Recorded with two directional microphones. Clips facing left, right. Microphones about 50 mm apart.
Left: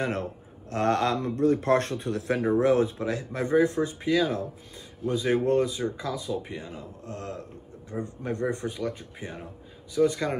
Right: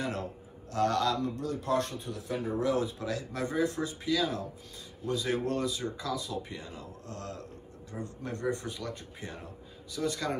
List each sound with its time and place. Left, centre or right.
0.0 s speech: left
2.6 s speech: left